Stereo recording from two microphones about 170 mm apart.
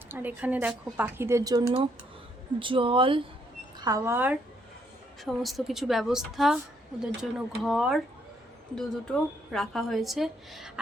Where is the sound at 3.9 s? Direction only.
15° right (ahead or behind).